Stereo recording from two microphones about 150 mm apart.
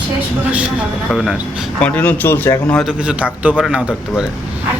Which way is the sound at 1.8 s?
10° left (ahead or behind).